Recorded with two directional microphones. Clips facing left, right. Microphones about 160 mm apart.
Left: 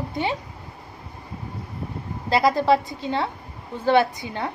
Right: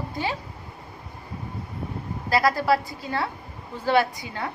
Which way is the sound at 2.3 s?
20° left (ahead or behind).